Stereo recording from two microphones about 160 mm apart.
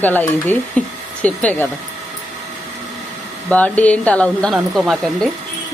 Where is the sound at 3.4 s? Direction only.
10° left (ahead or behind).